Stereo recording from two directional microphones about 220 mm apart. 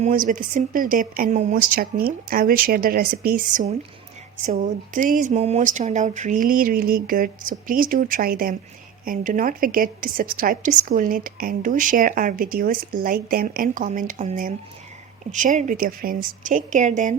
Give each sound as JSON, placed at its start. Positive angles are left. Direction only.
{"t": 0.0, "sound": "a woman's voice", "side_deg": -35}